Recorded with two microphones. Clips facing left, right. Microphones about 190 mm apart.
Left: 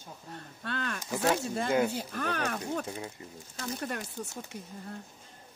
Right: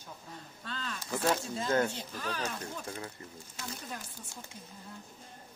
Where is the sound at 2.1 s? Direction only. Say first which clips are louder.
Left 4 dB; 60° left (ahead or behind).